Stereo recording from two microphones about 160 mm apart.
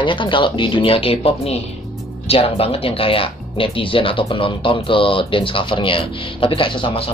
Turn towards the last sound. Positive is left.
turn(degrees=35)  # may be behind; listen again after turning